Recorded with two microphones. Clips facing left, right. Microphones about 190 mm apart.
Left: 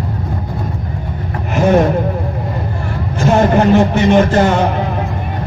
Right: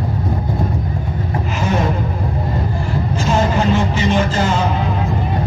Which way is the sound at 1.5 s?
60° left (ahead or behind).